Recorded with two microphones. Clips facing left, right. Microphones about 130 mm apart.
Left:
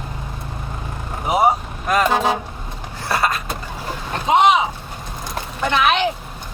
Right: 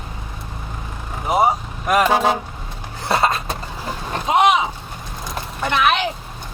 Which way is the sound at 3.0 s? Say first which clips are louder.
Right 2 dB; 25° right (ahead or behind).